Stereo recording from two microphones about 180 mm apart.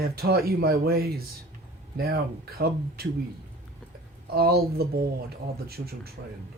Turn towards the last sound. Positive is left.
turn(degrees=-60)  # may be behind; listen again after turning